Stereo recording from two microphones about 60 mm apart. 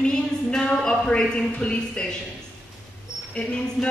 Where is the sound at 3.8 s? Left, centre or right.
Centre.